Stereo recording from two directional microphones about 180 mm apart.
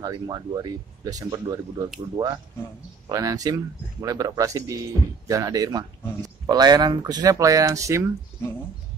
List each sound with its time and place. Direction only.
0.0 s speech: 20° right (ahead or behind)